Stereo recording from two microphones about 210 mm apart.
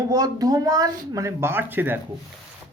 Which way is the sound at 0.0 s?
15° right (ahead or behind).